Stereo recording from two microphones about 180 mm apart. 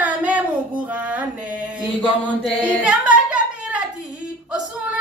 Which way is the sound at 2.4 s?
5° right (ahead or behind).